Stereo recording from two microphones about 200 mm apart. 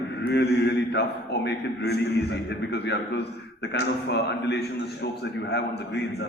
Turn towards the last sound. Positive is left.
turn(degrees=55)  # may be behind; listen again after turning